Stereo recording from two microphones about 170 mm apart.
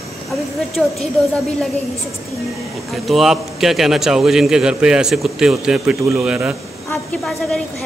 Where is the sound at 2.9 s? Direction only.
Centre (ahead or behind).